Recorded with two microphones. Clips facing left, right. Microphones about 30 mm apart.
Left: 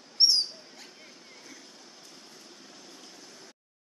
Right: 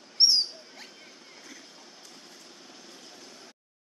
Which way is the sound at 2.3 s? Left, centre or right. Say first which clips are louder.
Right 1 dB; centre.